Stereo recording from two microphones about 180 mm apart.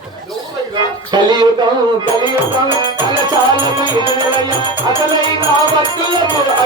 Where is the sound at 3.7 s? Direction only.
25° right (ahead or behind).